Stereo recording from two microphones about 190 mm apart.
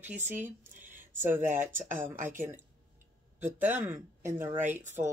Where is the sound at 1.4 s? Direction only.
40° right (ahead or behind).